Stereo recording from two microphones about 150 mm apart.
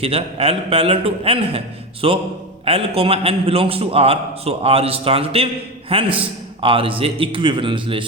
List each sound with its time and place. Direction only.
0.0 s a man's voice: 40° right (ahead or behind)